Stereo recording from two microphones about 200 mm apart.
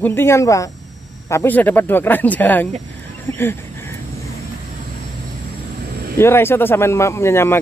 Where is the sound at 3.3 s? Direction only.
10° left (ahead or behind).